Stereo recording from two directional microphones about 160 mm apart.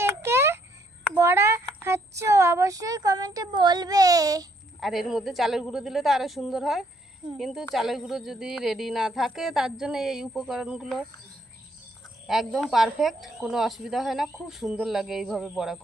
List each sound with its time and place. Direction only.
0.0 s a sound: 15° right (ahead or behind)
1.1 s a child's voice: 15° right (ahead or behind)
4.8 s a woman's voice: centre (ahead or behind)
12.3 s a woman's voice: centre (ahead or behind)